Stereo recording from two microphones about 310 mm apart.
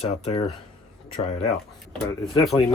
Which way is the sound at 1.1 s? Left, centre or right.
Left.